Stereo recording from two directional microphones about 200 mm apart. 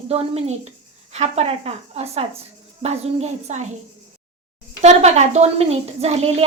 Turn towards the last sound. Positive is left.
turn(degrees=-30)  # may be behind; listen again after turning